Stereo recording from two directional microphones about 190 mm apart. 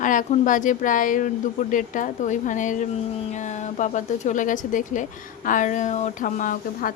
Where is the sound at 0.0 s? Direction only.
45° left (ahead or behind).